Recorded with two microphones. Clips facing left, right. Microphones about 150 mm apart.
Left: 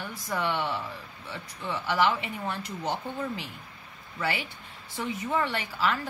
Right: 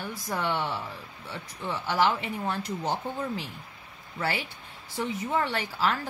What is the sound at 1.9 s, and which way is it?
Speech, 35° right (ahead or behind).